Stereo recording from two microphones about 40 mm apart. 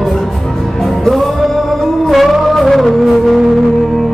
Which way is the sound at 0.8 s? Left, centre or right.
Centre.